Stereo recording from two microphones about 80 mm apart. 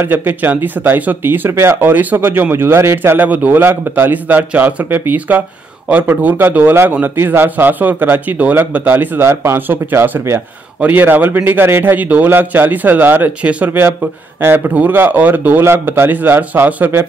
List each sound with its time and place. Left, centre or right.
0.0 s speech: right
13.7 s speech: right